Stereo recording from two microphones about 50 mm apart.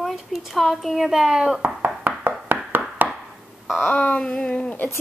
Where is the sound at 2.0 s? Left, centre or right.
Right.